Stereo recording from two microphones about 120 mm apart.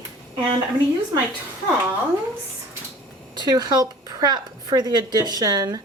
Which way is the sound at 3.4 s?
35° right (ahead or behind).